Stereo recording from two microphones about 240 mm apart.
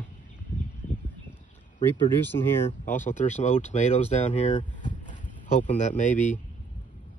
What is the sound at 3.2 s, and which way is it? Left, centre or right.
Speech, left.